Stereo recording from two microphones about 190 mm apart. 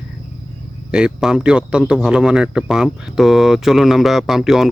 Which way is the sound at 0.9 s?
5° right (ahead or behind).